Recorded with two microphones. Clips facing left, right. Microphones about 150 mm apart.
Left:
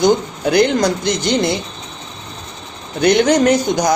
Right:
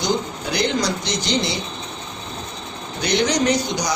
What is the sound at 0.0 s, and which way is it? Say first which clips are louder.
Speech: left 8 dB; 55° left (ahead or behind).